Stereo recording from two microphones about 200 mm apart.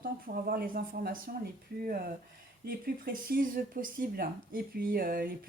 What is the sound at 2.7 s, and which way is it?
Speech, 45° right (ahead or behind).